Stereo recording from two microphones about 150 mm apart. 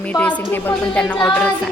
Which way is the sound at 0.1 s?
10° left (ahead or behind).